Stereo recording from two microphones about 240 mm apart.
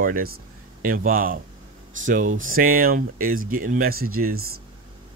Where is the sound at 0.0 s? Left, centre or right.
Right.